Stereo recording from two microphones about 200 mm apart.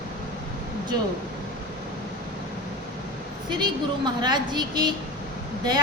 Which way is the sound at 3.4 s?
20° right (ahead or behind).